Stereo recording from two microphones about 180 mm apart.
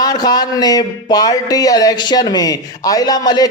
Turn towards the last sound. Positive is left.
turn(degrees=20)  # may be behind; listen again after turning